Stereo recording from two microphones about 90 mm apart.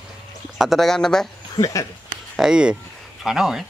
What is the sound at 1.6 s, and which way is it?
Speech, 40° left (ahead or behind).